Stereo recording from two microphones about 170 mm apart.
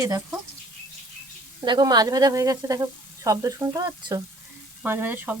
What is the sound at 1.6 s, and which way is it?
A woman's voice, 25° right (ahead or behind).